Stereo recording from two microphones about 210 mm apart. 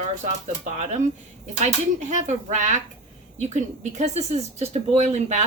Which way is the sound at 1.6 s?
35° right (ahead or behind).